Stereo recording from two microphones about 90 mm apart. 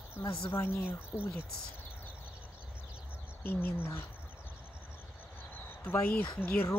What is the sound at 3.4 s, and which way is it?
Speech, 25° left (ahead or behind).